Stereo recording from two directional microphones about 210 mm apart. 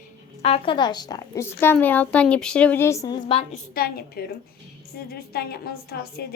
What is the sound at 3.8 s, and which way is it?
A woman's voice, 45° left (ahead or behind).